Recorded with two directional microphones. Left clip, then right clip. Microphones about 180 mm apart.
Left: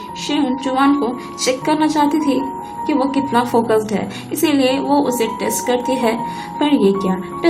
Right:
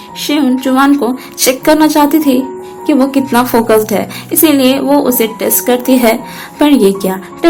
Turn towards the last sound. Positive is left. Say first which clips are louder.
# right 6 dB
turn(degrees=-45)  # may be behind; listen again after turning